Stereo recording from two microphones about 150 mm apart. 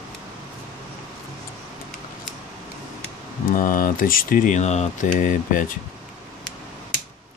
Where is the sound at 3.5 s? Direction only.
65° left (ahead or behind).